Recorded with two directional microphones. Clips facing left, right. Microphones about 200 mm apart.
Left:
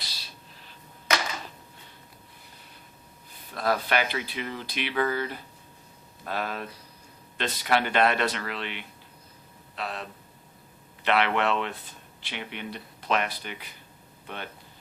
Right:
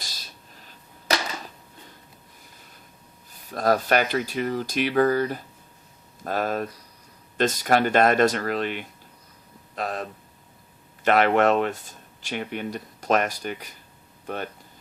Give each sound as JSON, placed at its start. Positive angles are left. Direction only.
{"t": 0.0, "sound": "arrow", "side_deg": -45}
{"t": 3.5, "sound": "speech", "side_deg": -45}